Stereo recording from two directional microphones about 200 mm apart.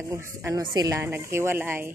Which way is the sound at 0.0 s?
15° right (ahead or behind).